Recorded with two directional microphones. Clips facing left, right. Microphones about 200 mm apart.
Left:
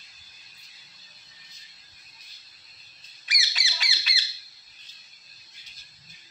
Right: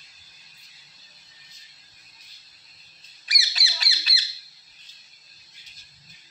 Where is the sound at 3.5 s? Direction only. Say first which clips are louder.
Right 1 dB; 35° right (ahead or behind).